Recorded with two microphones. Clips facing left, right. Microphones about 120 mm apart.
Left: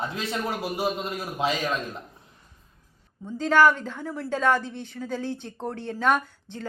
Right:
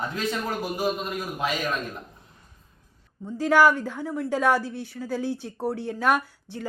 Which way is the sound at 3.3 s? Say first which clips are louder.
Even; 10° right (ahead or behind).